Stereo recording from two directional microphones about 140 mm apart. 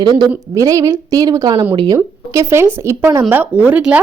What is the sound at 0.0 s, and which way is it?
A woman's voice, 25° right (ahead or behind).